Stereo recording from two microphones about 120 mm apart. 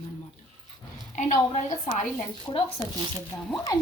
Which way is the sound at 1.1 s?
90° left.